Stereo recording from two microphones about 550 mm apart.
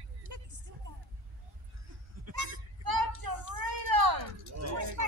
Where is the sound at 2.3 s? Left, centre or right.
Right.